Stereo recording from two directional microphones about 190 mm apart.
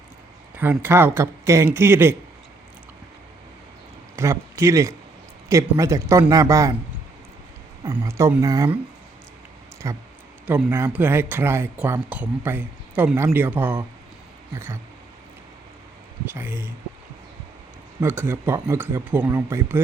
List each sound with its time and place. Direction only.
0.5 s speech: 10° right (ahead or behind)
4.1 s speech: 15° right (ahead or behind)
7.9 s speech: 15° right (ahead or behind)
9.8 s speech: 15° right (ahead or behind)
16.3 s speech: 10° right (ahead or behind)
18.0 s speech: 10° right (ahead or behind)